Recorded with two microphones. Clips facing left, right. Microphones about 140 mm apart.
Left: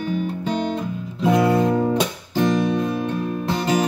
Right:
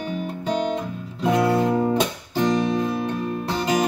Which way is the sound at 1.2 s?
Centre (ahead or behind).